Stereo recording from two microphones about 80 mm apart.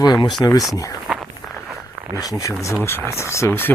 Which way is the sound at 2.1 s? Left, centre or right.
Left.